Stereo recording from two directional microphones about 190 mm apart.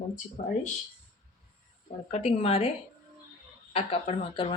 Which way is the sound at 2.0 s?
35° left (ahead or behind).